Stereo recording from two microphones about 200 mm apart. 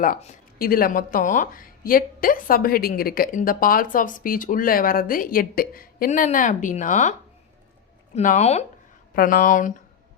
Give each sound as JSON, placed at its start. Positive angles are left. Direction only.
{"t": 0.0, "sound": "speech", "side_deg": 40}
{"t": 9.1, "sound": "speech", "side_deg": 45}